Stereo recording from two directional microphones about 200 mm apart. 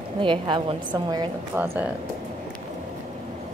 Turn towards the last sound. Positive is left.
turn(degrees=-10)  # may be behind; listen again after turning